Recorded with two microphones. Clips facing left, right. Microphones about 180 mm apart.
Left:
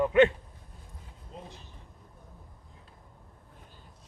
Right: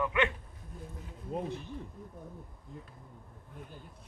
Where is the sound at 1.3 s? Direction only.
55° right (ahead or behind).